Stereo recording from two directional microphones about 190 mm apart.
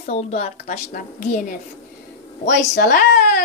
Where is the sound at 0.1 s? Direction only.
35° left (ahead or behind).